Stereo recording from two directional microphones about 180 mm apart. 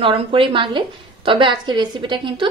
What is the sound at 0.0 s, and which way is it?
A woman's voice, 30° right (ahead or behind).